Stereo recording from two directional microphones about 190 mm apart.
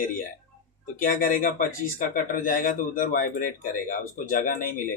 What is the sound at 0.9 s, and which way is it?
Speech, 45° left (ahead or behind).